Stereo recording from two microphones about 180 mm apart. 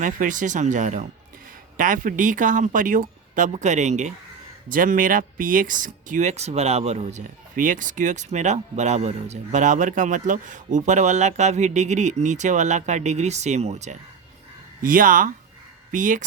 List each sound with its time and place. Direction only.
0.0 s speech: 45° right (ahead or behind)